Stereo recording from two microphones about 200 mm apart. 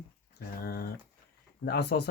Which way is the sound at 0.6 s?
50° left (ahead or behind).